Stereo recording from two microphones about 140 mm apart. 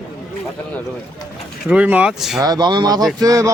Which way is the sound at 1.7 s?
10° right (ahead or behind).